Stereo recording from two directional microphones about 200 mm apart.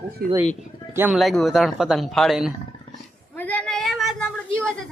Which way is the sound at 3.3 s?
10° left (ahead or behind).